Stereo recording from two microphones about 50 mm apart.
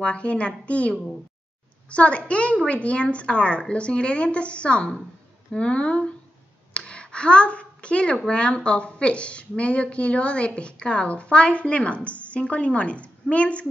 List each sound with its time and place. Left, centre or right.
0.0 s a woman's voice: left
6.9 s a sound: left
8.3 s a woman's voice: left